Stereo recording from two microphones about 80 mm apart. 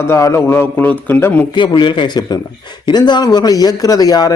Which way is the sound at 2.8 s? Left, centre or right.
Left.